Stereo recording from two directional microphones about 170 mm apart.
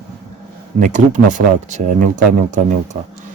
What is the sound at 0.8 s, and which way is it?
Speech, 45° right (ahead or behind).